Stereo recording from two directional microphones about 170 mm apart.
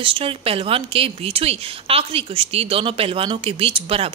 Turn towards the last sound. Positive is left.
turn(degrees=-35)  # may be behind; listen again after turning